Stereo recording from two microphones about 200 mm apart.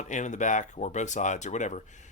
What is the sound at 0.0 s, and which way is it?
Speech, 35° left (ahead or behind).